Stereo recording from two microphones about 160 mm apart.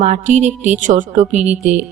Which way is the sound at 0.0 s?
45° right (ahead or behind).